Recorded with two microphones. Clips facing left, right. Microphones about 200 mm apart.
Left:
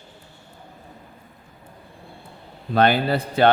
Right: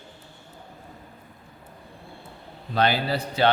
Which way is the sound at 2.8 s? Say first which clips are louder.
Left 5 dB; 55° left (ahead or behind).